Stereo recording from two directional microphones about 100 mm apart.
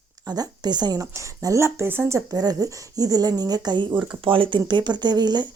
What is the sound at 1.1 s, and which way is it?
Speech, 35° right (ahead or behind).